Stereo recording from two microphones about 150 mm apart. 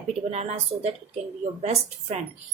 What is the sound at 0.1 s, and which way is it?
Speech, 45° right (ahead or behind).